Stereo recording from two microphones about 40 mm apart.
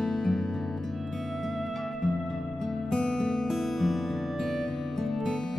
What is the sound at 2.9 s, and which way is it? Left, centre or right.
Music, centre.